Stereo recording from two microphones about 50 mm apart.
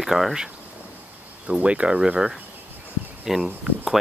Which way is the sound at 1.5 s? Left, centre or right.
Right.